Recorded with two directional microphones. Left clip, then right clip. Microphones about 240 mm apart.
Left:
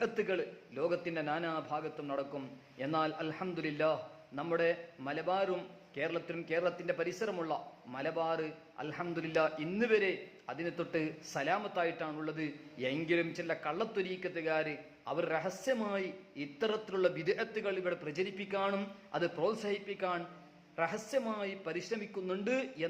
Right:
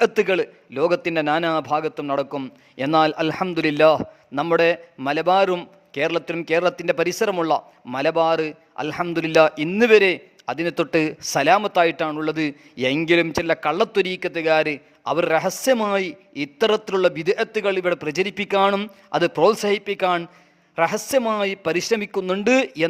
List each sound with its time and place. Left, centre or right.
0.0 s a man's voice: right